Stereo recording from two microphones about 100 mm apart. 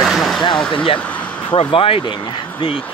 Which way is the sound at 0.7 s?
60° left (ahead or behind).